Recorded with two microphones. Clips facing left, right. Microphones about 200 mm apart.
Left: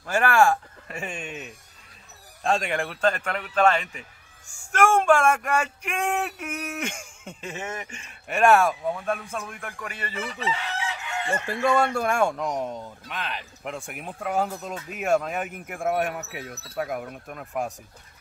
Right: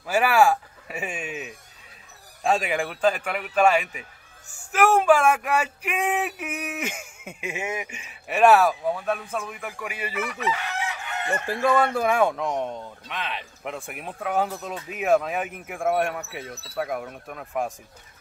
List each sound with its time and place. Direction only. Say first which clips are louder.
0.0 s speech: right 1 dB; 5° right (ahead or behind)
10.2 s chicken: right 1 dB; 30° left (ahead or behind)
11.4 s speech: right 1 dB; 5° right (ahead or behind)